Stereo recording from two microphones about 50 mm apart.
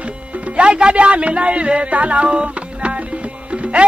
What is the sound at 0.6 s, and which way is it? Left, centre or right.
Speech, right.